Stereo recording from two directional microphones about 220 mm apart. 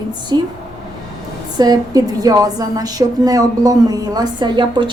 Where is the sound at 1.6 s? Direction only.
15° right (ahead or behind).